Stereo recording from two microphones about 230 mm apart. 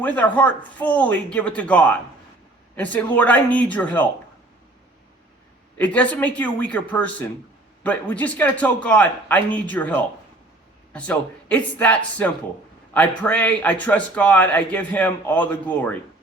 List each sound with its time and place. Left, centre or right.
0.0 s a man's voice: centre
5.7 s a man's voice: centre